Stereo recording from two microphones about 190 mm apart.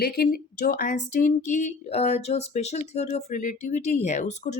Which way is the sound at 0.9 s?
40° left (ahead or behind).